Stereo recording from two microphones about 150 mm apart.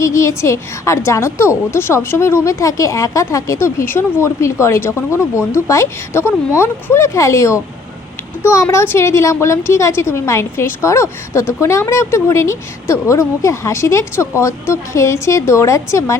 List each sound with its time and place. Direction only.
0.0 s a woman's voice: 20° left (ahead or behind)